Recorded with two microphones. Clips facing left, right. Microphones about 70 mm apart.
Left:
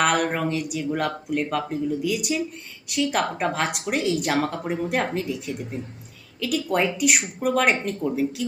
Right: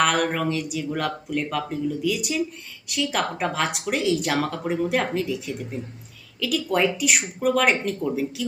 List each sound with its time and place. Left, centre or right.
0.0 s speech: centre